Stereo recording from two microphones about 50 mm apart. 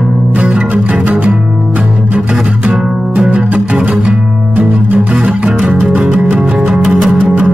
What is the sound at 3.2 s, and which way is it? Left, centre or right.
Music, centre.